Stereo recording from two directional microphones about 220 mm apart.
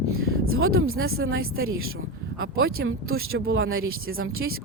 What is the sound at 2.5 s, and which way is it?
Speech, 70° right (ahead or behind).